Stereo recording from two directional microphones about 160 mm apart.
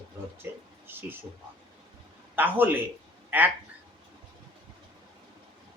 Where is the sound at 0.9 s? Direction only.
15° right (ahead or behind).